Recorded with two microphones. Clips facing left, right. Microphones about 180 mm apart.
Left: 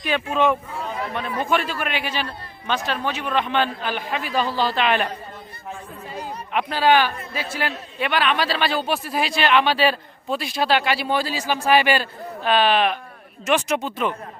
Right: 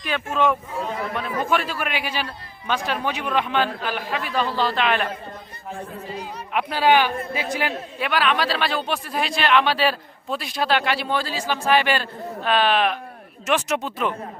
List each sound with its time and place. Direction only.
0.1 s speech: centre (ahead or behind)
1.5 s a man's voice: 5° right (ahead or behind)
6.5 s a man's voice: 10° right (ahead or behind)
7.9 s speech: centre (ahead or behind)